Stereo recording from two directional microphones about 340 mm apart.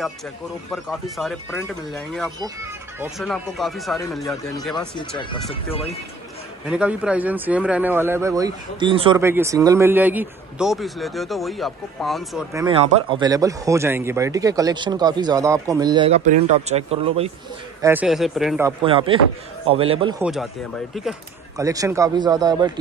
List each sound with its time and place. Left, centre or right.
0.7 s a man's voice: centre
4.7 s speech: centre
6.7 s a man's voice: centre
12.6 s speech: centre
17.8 s speech: centre
20.2 s speech: centre